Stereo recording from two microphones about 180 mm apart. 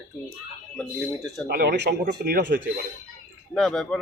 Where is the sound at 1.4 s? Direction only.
60° right (ahead or behind).